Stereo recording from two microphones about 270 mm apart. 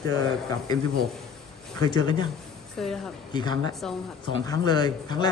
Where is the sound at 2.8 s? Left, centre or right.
Centre.